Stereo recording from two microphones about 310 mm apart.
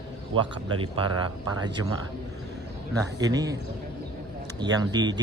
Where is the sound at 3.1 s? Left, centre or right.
Centre.